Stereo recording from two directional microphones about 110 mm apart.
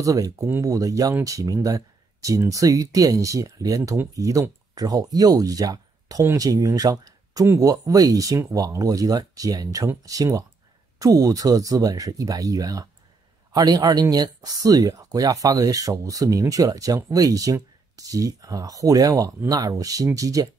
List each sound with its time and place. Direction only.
0.0 s speech: 30° right (ahead or behind)